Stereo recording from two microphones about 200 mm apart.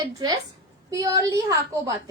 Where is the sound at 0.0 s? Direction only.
20° right (ahead or behind).